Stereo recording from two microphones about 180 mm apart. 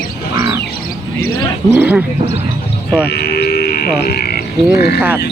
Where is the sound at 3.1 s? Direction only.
65° left (ahead or behind).